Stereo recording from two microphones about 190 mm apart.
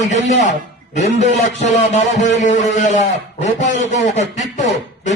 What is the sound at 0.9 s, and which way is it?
A man's voice, 40° left (ahead or behind).